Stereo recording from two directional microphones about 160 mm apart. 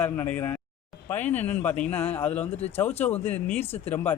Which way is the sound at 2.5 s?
40° left (ahead or behind).